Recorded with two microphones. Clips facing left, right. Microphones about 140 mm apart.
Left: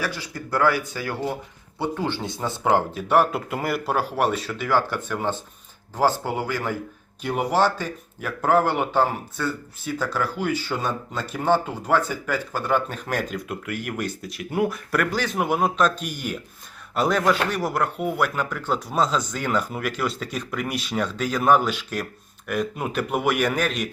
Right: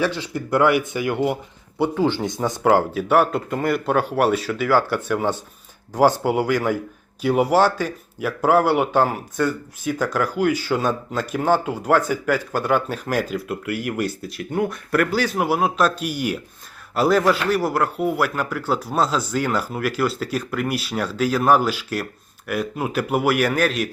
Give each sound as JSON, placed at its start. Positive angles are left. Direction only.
{"t": 0.0, "sound": "speech", "side_deg": -25}
{"t": 2.6, "sound": "a man's voice", "side_deg": -5}